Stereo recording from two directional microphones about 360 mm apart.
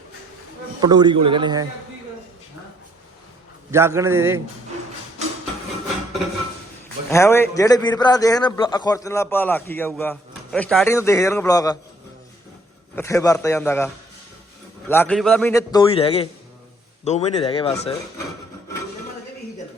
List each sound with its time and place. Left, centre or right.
0.8 s a man's voice: centre
3.7 s a man's voice: centre
7.1 s a man's voice: centre
13.0 s a man's voice: centre